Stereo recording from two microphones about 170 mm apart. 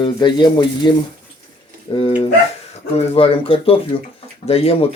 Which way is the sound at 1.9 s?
35° left (ahead or behind).